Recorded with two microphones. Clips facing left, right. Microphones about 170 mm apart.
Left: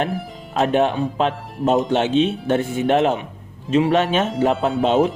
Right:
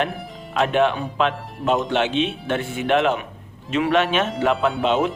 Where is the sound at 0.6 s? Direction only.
40° left (ahead or behind).